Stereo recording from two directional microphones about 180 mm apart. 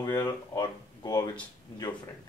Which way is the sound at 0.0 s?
20° left (ahead or behind).